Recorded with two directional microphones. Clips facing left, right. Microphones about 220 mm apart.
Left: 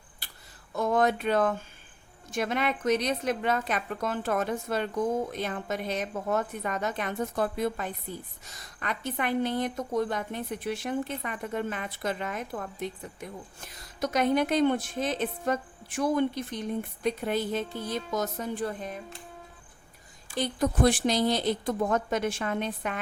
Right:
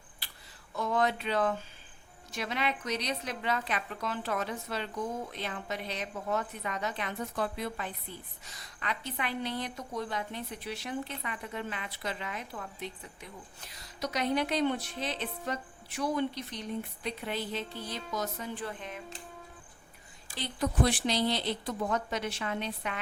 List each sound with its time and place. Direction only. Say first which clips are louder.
0.2 s a sound: left 2 dB; 45° left (ahead or behind)
0.8 s a woman's voice: left 5 dB; 45° left (ahead or behind)
20.3 s a woman's voice: left 5 dB; 45° left (ahead or behind)